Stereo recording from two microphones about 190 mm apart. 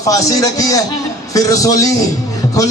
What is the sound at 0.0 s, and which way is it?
A man's voice, 20° left (ahead or behind).